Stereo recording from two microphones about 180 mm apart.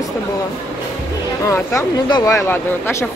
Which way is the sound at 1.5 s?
20° left (ahead or behind).